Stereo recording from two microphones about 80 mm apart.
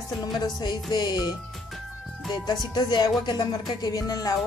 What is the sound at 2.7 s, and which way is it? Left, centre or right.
Speech, left.